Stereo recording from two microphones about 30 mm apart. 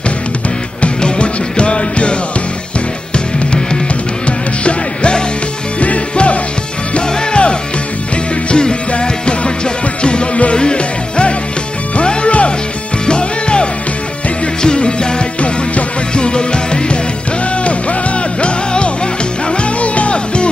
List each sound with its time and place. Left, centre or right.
0.8 s music: left
4.3 s music: left
6.1 s music: left
13.0 s music: left
14.8 s music: left
18.4 s music: left